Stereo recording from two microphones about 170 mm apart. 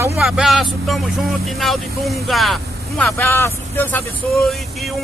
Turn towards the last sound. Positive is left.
turn(degrees=0)  # may be behind; listen again after turning